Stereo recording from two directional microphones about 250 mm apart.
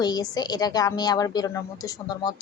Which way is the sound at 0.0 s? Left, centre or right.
Centre.